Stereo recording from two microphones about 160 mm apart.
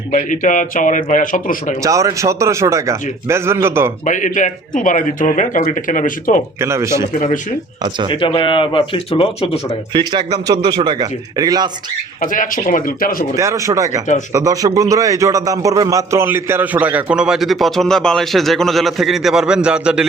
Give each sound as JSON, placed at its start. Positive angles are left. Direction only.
{"t": 0.1, "sound": "a man's voice", "side_deg": 50}
{"t": 1.8, "sound": "a man's voice", "side_deg": -20}
{"t": 4.0, "sound": "speech", "side_deg": 50}
{"t": 6.6, "sound": "a man's voice", "side_deg": -15}
{"t": 8.0, "sound": "speech", "side_deg": 30}
{"t": 9.9, "sound": "speech", "side_deg": -30}
{"t": 12.2, "sound": "speech", "side_deg": 55}
{"t": 13.3, "sound": "a man's voice", "side_deg": -20}